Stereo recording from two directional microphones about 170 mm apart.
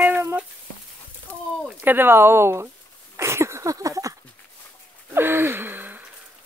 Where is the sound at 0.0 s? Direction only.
15° right (ahead or behind).